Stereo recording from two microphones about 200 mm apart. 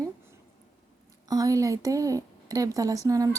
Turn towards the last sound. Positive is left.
turn(degrees=-15)  # may be behind; listen again after turning